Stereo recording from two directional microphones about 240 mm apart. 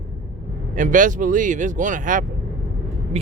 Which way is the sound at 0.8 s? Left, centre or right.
Right.